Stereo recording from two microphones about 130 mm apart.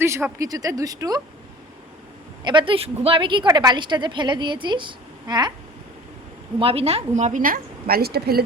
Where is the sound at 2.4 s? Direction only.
35° right (ahead or behind).